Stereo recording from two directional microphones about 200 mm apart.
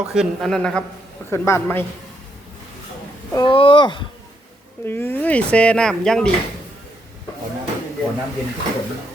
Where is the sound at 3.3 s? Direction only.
25° left (ahead or behind).